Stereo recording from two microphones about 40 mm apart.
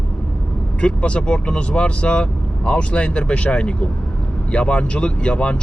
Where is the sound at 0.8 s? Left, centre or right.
Left.